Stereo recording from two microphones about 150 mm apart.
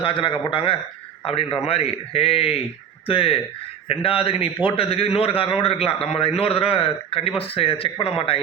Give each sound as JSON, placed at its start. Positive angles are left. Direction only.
{"t": 0.0, "sound": "a man's voice", "side_deg": 35}